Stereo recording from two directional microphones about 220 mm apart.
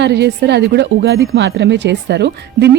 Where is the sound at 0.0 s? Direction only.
50° right (ahead or behind).